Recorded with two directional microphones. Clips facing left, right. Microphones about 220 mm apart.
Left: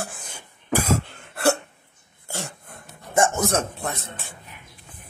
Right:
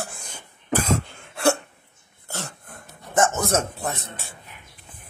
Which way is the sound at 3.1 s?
10° left (ahead or behind).